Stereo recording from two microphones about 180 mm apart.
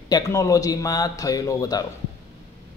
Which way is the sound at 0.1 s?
20° left (ahead or behind).